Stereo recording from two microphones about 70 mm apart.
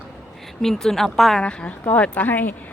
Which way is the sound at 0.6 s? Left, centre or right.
Centre.